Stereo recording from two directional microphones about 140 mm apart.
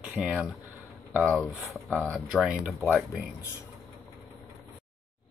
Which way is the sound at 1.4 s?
10° left (ahead or behind).